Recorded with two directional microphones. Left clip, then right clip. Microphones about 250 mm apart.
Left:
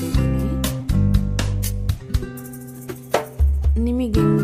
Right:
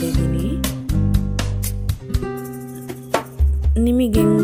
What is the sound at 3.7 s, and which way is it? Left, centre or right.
Music, centre.